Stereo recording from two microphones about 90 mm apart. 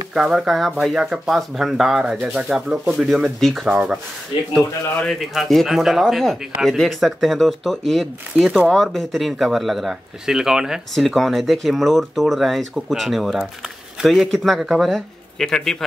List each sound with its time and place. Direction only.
0.1 s speech: 5° right (ahead or behind)
3.7 s speech: 15° right (ahead or behind)
5.2 s speech: centre (ahead or behind)